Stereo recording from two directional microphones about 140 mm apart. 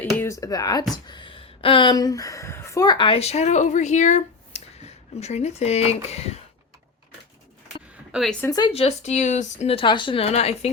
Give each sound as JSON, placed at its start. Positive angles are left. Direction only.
{"t": 0.2, "sound": "speech", "side_deg": 20}
{"t": 3.2, "sound": "speech", "side_deg": 50}
{"t": 8.1, "sound": "speech", "side_deg": 0}
{"t": 8.4, "sound": "speech", "side_deg": 30}
{"t": 8.7, "sound": "speech", "side_deg": 45}